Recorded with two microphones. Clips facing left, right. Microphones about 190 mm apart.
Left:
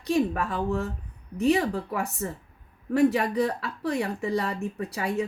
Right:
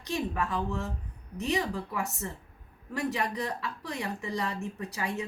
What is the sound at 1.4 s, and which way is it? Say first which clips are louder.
A woman's voice: left 7 dB; 60° left (ahead or behind).